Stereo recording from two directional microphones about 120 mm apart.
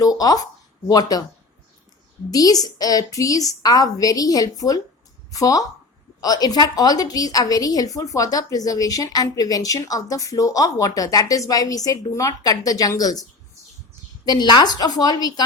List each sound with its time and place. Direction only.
0.0 s a woman's voice: 30° left (ahead or behind)
2.3 s a woman's voice: 30° left (ahead or behind)
14.3 s a woman's voice: 40° left (ahead or behind)